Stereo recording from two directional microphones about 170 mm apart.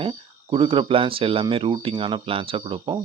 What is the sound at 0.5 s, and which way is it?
Speech, 30° right (ahead or behind).